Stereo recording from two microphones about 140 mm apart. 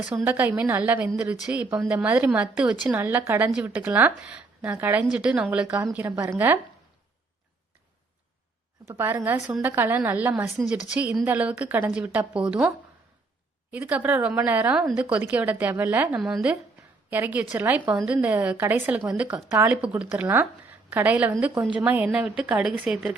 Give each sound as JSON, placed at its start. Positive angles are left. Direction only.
{"t": 0.3, "sound": "a woman's voice", "side_deg": -10}
{"t": 8.9, "sound": "a woman's voice", "side_deg": -15}